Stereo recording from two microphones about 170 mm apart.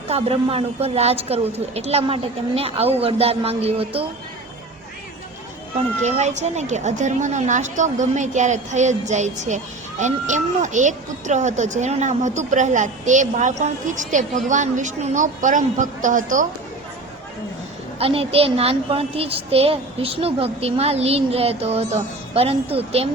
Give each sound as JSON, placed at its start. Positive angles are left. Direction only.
{"t": 0.1, "sound": "a child's voice", "side_deg": -35}
{"t": 6.0, "sound": "speech", "side_deg": -40}
{"t": 18.0, "sound": "a child's voice", "side_deg": -35}